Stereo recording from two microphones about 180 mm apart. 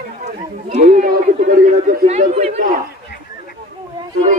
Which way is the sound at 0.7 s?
40° right (ahead or behind).